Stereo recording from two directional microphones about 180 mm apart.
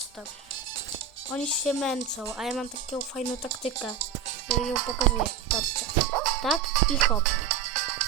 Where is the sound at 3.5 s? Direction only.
90° right.